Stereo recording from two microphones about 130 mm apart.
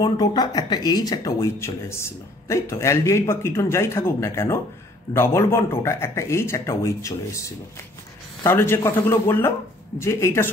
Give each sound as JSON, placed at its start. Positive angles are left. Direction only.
{"t": 0.0, "sound": "a man's voice", "side_deg": 35}